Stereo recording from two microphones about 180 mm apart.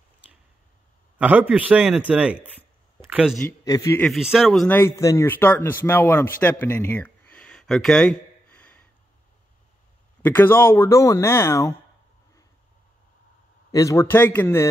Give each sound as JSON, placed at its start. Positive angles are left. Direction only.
{"t": 1.1, "sound": "speech", "side_deg": -10}
{"t": 3.0, "sound": "a sound", "side_deg": -5}
{"t": 3.6, "sound": "speech", "side_deg": 20}
{"t": 4.1, "sound": "speech", "side_deg": -5}
{"t": 4.7, "sound": "speech", "side_deg": 15}
{"t": 10.2, "sound": "speech", "side_deg": 10}
{"t": 13.7, "sound": "speech", "side_deg": 20}